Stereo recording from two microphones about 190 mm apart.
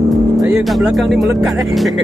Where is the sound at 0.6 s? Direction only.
Centre (ahead or behind).